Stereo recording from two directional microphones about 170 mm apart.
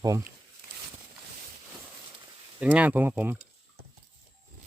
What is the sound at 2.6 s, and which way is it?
Speech, 10° right (ahead or behind).